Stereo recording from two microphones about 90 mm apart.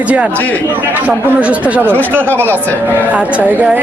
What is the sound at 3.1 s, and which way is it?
Speech, 15° right (ahead or behind).